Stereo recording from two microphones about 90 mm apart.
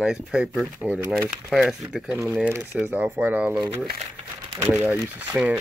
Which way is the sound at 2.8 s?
15° right (ahead or behind).